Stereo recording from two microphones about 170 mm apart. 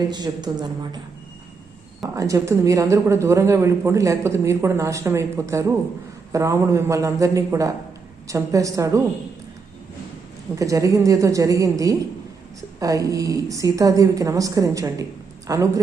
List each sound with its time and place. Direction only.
0.1 s a woman's voice: 25° right (ahead or behind)
2.1 s a woman's voice: 20° right (ahead or behind)
10.5 s a woman's voice: 20° right (ahead or behind)